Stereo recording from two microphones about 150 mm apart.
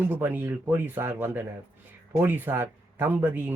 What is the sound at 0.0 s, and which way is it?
Speech, 15° right (ahead or behind).